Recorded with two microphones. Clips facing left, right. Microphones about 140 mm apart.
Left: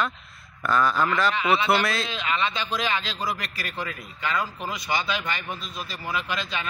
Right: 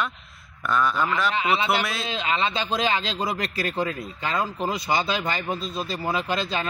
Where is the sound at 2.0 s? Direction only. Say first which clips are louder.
Right 2 dB; 30° right (ahead or behind).